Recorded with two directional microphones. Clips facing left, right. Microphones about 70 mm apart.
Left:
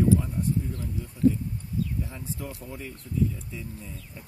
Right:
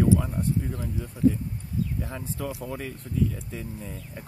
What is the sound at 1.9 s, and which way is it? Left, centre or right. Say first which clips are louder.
Speech: right 2 dB; right.